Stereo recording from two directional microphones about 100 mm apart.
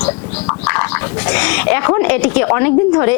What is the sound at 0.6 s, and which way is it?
Frog, 15° left (ahead or behind).